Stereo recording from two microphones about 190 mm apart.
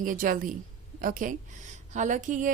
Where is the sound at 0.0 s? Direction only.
45° right (ahead or behind).